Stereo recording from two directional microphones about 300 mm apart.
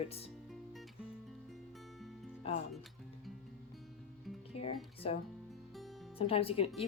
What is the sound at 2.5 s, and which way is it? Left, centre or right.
Speech, centre.